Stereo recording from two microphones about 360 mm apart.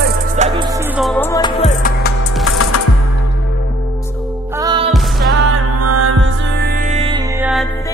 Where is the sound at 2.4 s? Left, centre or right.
Left.